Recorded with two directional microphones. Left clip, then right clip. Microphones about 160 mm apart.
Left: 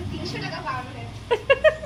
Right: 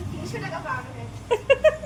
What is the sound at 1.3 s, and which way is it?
Cat, 5° right (ahead or behind).